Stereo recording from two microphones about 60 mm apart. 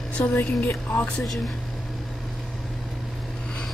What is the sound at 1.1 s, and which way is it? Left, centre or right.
Speech, centre.